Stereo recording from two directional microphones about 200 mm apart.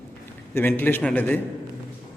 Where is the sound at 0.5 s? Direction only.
10° left (ahead or behind).